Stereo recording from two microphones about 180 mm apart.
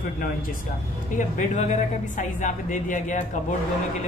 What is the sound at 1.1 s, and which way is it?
Speech, 40° left (ahead or behind).